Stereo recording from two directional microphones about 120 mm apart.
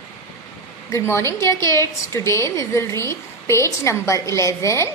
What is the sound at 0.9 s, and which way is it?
A woman's voice, 25° left (ahead or behind).